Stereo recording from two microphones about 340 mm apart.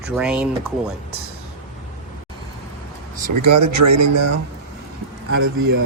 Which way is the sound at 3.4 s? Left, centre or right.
Right.